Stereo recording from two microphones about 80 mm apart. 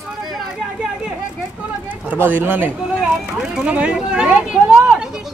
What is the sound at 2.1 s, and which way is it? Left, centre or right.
Speech, right.